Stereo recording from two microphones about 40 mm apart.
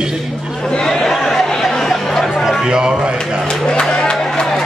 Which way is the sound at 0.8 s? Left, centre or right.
Centre.